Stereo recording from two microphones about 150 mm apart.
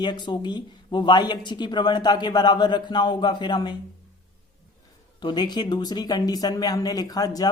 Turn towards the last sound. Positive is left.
turn(degrees=25)  # may be behind; listen again after turning